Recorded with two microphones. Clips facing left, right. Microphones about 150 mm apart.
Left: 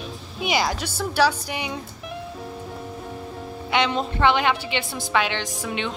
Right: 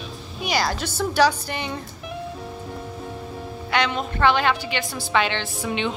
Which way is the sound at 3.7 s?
25° left (ahead or behind).